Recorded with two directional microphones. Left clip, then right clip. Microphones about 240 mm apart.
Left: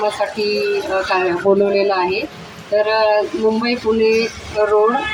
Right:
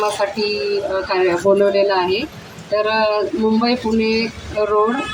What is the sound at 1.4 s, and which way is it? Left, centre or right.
A woman's voice, right.